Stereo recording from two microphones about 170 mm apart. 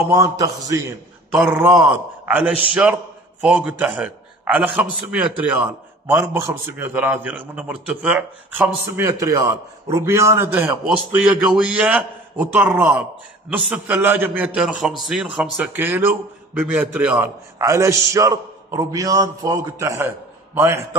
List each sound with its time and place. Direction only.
0.1 s a man's voice: 20° right (ahead or behind)